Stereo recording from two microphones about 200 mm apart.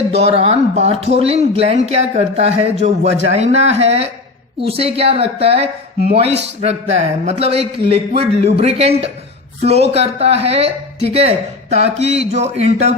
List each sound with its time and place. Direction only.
0.1 s speech: 30° right (ahead or behind)